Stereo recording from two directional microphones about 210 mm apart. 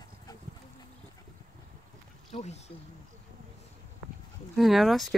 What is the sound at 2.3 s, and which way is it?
Speech, 30° left (ahead or behind).